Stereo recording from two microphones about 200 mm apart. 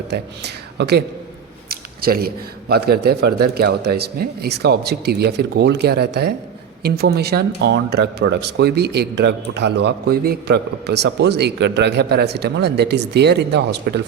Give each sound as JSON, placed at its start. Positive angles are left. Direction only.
{"t": 0.1, "sound": "a man's voice", "side_deg": -55}